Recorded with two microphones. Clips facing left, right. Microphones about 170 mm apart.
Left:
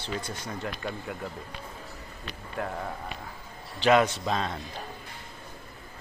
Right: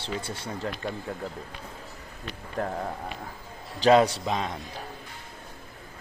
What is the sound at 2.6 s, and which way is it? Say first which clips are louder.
Speech: right 3 dB; 40° right (ahead or behind).